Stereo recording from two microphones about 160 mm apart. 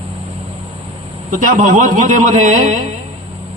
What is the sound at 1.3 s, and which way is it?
A man's voice, 55° right (ahead or behind).